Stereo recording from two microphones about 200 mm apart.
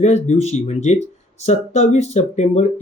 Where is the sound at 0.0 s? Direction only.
35° left (ahead or behind).